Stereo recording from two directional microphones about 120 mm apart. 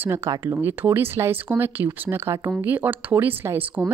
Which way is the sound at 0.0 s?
25° right (ahead or behind).